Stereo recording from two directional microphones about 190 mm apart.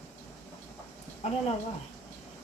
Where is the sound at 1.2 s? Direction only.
35° left (ahead or behind).